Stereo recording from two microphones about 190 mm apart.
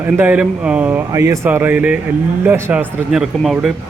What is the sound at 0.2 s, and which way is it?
Speech, 5° right (ahead or behind).